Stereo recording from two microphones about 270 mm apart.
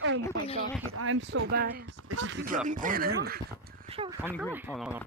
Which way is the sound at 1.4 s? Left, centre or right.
Right.